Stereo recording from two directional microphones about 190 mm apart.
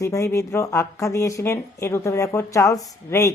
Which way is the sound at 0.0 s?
15° left (ahead or behind).